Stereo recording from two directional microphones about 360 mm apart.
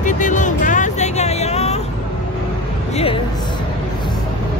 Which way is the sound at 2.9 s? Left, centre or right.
Centre.